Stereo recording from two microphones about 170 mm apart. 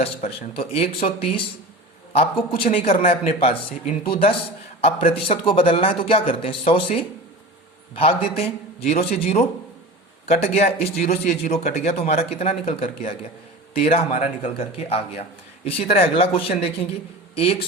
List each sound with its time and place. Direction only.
0.0 s speech: 35° left (ahead or behind)
13.9 s a man's voice: 50° left (ahead or behind)
14.4 s a man's voice: 35° left (ahead or behind)